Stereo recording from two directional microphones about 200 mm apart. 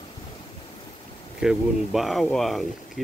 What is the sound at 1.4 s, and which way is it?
Speech, centre (ahead or behind).